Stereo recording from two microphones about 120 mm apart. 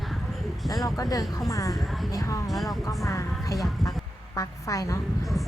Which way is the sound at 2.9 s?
25° left (ahead or behind).